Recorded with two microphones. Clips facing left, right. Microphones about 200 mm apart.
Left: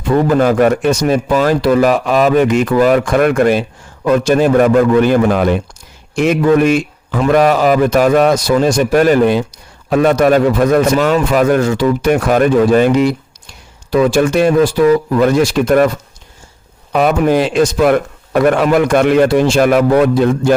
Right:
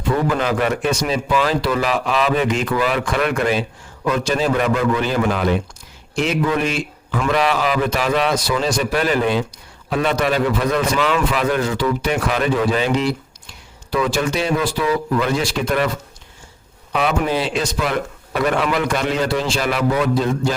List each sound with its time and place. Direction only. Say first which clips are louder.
0.3 s a man's voice: left 8 dB; 45° left (ahead or behind)
16.9 s a man's voice: left 7 dB; 45° left (ahead or behind)